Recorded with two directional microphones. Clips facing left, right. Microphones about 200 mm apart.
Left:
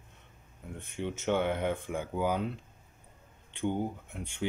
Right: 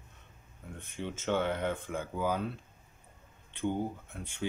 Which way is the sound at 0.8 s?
15° left (ahead or behind).